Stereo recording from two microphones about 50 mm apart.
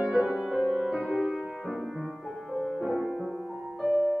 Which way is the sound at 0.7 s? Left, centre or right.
Centre.